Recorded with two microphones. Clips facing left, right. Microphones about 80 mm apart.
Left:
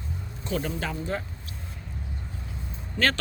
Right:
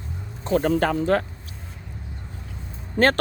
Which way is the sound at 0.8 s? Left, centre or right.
Right.